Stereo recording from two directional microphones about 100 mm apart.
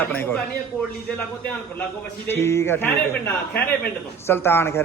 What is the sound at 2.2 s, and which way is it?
A man's voice, 25° left (ahead or behind).